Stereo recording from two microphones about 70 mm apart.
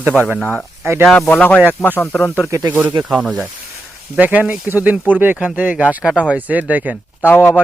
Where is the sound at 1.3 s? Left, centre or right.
Left.